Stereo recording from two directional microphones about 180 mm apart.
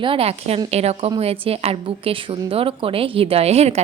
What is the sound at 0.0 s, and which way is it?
A woman's voice, 30° right (ahead or behind).